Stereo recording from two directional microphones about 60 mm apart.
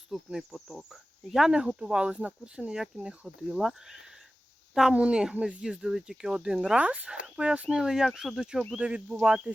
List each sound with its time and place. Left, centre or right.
0.1 s a woman's voice: centre
8.8 s speech: right